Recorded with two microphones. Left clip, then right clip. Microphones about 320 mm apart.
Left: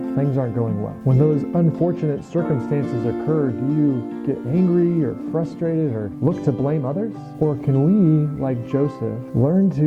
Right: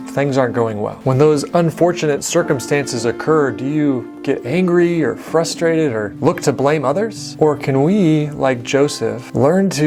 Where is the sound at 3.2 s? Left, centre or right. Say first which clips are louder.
Right 8 dB; centre.